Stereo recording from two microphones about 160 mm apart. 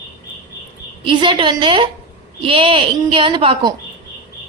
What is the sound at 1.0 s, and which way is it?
A woman's voice, 30° right (ahead or behind).